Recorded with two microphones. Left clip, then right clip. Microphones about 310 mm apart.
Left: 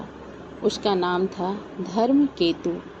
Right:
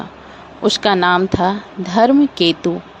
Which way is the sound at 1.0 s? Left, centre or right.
Right.